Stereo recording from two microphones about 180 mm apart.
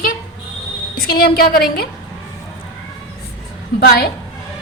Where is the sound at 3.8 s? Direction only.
60° left (ahead or behind).